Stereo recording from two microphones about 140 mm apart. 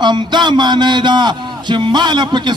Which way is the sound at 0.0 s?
30° right (ahead or behind).